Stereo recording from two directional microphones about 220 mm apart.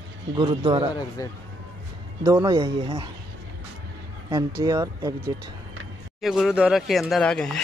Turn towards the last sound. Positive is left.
turn(degrees=5)  # may be behind; listen again after turning